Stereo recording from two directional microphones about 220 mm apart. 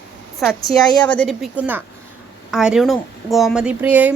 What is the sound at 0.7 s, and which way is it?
Speech, 20° left (ahead or behind).